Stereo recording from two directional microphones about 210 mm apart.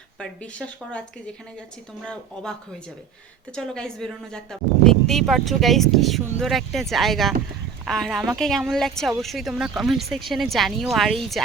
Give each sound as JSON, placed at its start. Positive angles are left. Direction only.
{"t": 0.2, "sound": "speech", "side_deg": 5}
{"t": 2.0, "sound": "speech", "side_deg": 5}